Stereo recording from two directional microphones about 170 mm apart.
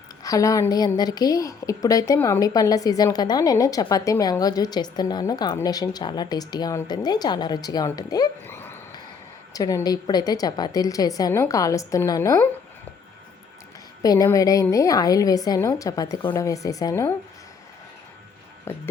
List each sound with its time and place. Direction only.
0.2 s a woman's voice: 20° left (ahead or behind)
14.0 s a woman's voice: 20° left (ahead or behind)
18.7 s speech: 15° left (ahead or behind)